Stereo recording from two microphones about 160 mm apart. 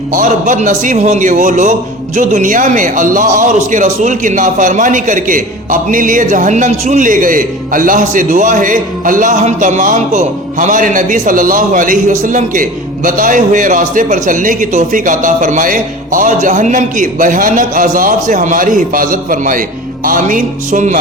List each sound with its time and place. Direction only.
0.1 s a man's voice: 55° right (ahead or behind)